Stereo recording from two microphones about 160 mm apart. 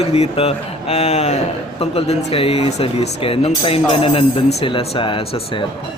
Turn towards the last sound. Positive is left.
turn(degrees=35)  # may be behind; listen again after turning